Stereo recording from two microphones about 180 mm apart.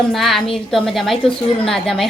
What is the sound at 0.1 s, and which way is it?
A woman's voice, centre (ahead or behind).